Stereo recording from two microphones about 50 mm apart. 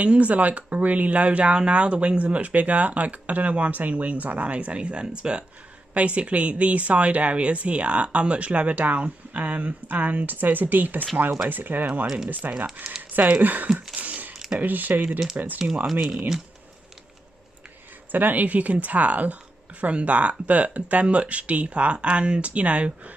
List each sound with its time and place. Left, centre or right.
0.0 s speech: right
13.9 s throat clearing: right
14.6 s speech: right
18.1 s speech: right